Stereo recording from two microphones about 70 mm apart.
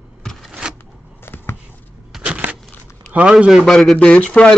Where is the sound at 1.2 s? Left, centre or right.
Left.